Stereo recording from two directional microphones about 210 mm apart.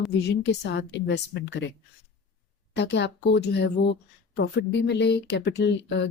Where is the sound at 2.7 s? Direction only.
55° left (ahead or behind).